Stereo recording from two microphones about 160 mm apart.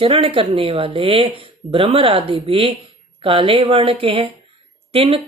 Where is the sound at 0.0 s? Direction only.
35° right (ahead or behind).